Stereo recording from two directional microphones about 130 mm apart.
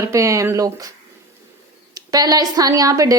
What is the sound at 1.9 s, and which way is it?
A woman's voice, 30° right (ahead or behind).